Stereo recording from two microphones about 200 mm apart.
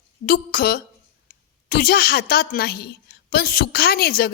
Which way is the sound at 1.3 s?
45° left (ahead or behind).